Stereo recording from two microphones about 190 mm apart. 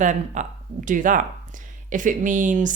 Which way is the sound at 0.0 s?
40° right (ahead or behind).